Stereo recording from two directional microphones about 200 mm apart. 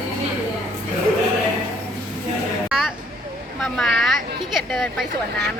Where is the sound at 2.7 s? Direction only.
5° right (ahead or behind).